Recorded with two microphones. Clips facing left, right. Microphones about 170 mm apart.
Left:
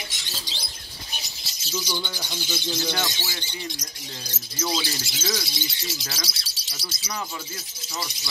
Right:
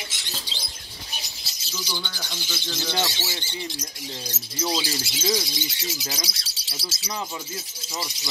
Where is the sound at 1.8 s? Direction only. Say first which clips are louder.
Left 3 dB; 15° left (ahead or behind).